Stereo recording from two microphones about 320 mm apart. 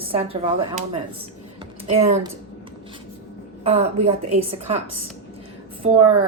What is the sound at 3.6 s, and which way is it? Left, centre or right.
Speech, centre.